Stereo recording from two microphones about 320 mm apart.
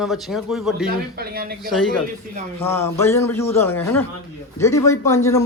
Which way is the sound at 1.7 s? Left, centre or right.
Centre.